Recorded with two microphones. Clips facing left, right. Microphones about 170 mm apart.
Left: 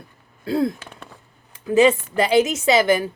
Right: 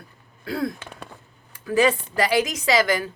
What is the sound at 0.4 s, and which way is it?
A woman's voice, 25° left (ahead or behind).